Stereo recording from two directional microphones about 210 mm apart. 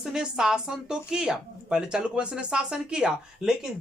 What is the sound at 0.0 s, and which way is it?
A woman's voice, 5° right (ahead or behind).